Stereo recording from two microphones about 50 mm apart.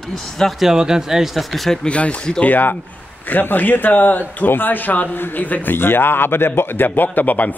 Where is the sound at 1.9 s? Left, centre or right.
Left.